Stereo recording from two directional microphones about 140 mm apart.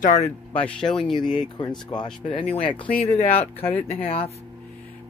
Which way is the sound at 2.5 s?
35° left (ahead or behind).